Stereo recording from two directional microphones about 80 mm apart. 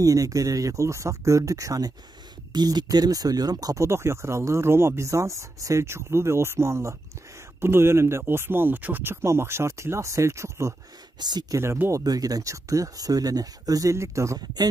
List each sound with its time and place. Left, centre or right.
0.0 s speech: right
2.5 s speech: right
11.1 s speech: right
11.5 s speech: right
12.0 s speech: right